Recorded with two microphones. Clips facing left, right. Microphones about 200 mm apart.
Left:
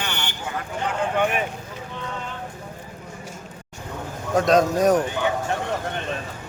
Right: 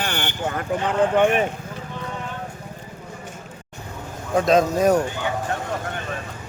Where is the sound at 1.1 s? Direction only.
45° right (ahead or behind).